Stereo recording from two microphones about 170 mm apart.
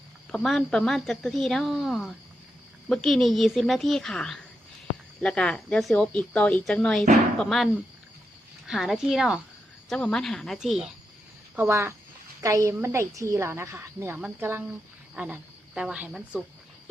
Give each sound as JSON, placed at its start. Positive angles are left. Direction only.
{"t": 0.3, "sound": "a woman's voice", "side_deg": 0}
{"t": 11.5, "sound": "a woman's voice", "side_deg": -15}